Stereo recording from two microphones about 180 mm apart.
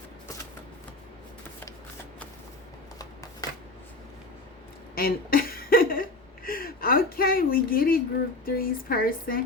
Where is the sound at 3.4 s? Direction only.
20° left (ahead or behind).